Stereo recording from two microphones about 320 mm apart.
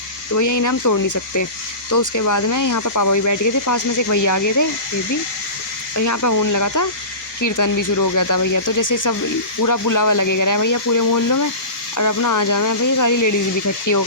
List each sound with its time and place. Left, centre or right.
0.3 s speech: left
6.0 s speech: left